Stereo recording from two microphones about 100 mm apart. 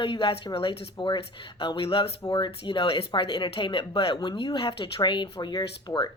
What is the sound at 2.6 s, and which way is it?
Speech, 60° left (ahead or behind).